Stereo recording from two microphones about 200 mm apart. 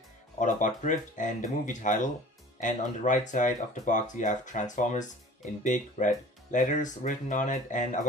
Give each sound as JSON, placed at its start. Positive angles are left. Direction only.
{"t": 0.3, "sound": "speech", "side_deg": 40}